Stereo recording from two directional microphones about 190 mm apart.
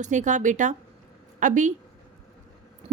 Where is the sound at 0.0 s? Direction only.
40° right (ahead or behind).